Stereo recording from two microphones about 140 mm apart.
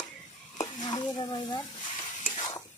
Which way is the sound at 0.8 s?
30° left (ahead or behind).